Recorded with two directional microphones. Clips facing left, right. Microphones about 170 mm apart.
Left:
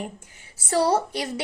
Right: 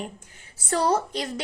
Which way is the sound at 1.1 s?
10° left (ahead or behind).